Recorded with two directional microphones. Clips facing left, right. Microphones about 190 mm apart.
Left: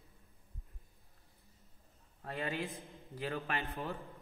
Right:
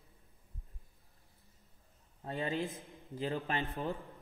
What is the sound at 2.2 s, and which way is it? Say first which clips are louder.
A man's voice: right 3 dB; 30° right (ahead or behind).